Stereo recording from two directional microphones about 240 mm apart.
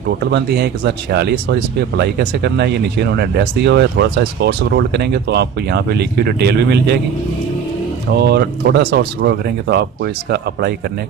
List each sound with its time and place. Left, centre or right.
0.2 s speech: right
8.1 s speech: right